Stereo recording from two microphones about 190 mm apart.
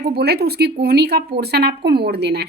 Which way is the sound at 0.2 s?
55° right (ahead or behind).